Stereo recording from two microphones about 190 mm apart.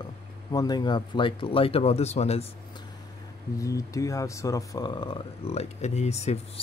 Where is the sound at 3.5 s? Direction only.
15° left (ahead or behind).